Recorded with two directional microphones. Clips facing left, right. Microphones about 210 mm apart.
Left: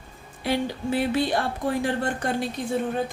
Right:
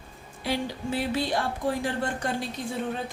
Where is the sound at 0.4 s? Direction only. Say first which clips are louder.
Left 4 dB; 55° left (ahead or behind).